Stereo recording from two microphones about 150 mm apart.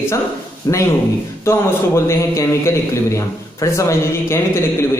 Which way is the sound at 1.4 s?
20° left (ahead or behind).